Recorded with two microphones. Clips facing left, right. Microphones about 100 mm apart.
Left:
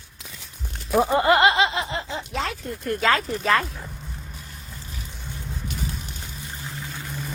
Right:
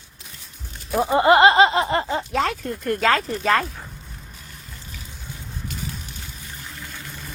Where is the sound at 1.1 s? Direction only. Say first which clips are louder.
Right 6 dB; 25° right (ahead or behind); by 3.7 s 40° right (ahead or behind).